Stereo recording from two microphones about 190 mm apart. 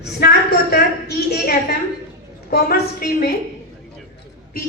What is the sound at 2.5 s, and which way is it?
Speech, 55° left (ahead or behind).